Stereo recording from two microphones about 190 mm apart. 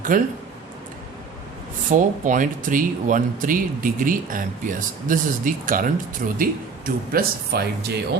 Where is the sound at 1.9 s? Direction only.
45° right (ahead or behind).